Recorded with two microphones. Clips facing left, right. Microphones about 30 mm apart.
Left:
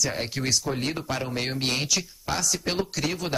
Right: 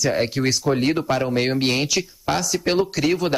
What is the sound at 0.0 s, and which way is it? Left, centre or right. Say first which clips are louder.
Speech: right 8 dB; centre.